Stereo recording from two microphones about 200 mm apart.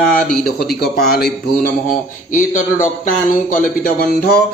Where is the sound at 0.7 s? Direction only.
50° left (ahead or behind).